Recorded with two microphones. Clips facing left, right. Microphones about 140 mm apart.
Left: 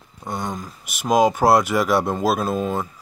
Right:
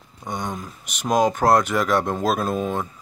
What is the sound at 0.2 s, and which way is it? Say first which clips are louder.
Speech: left 1 dB; 5° left (ahead or behind).